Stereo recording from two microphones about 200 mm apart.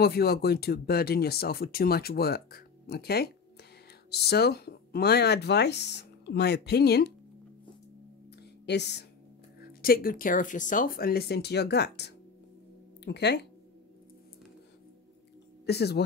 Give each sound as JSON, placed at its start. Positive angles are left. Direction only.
{"t": 0.0, "sound": "speech", "side_deg": 50}
{"t": 8.6, "sound": "speech", "side_deg": 55}
{"t": 15.6, "sound": "speech", "side_deg": 55}